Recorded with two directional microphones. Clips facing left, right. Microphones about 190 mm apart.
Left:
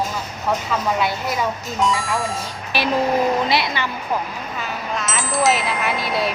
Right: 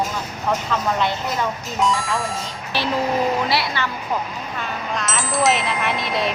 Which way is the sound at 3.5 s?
20° left (ahead or behind).